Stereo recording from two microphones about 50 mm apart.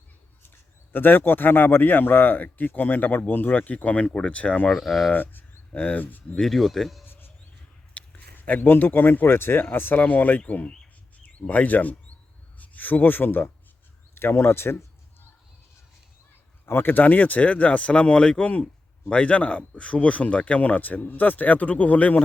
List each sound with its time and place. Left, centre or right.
0.9 s a man's voice: left
4.7 s speech: centre
5.1 s speech: left
6.3 s speech: centre
7.0 s a sound: left
7.9 s speech: left
10.4 s a man's voice: left
14.2 s a sound: left
16.6 s a man's voice: left